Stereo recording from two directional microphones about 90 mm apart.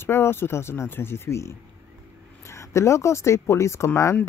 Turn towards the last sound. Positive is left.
turn(degrees=30)  # may be behind; listen again after turning